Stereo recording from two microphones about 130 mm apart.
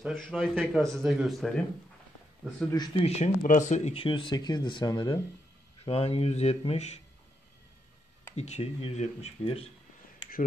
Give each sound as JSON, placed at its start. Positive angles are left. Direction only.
{"t": 0.0, "sound": "a man's voice", "side_deg": 0}
{"t": 2.7, "sound": "speech", "side_deg": 35}
{"t": 3.4, "sound": "speech", "side_deg": 75}
{"t": 3.9, "sound": "speech", "side_deg": 40}
{"t": 5.9, "sound": "speech", "side_deg": 50}
{"t": 8.4, "sound": "speech", "side_deg": 55}